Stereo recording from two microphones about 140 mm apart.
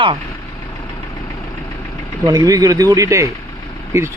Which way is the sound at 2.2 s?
25° right (ahead or behind).